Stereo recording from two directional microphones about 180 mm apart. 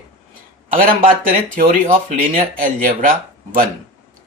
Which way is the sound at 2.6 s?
50° right (ahead or behind).